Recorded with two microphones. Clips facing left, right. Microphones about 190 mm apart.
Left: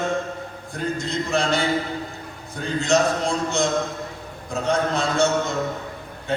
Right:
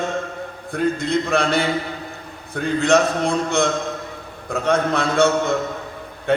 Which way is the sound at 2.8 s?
60° right (ahead or behind).